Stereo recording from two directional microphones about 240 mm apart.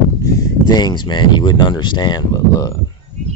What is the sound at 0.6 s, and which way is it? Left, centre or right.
Speech, centre.